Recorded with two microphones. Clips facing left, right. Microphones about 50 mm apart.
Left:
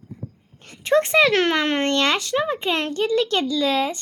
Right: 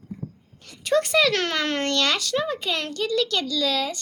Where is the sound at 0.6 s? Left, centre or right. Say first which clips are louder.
Left 3 dB; left.